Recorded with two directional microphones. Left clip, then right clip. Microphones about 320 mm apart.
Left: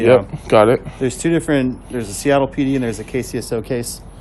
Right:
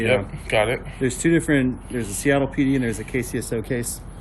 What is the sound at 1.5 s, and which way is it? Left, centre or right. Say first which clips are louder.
Speech: left 3 dB; left.